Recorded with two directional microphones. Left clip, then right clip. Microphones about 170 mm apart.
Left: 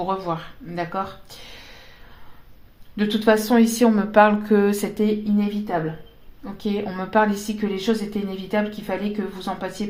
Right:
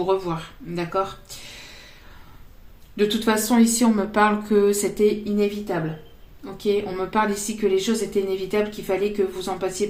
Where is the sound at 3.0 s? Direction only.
30° left (ahead or behind).